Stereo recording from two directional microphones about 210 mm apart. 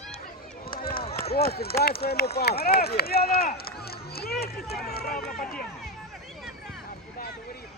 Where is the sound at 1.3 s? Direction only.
50° left (ahead or behind).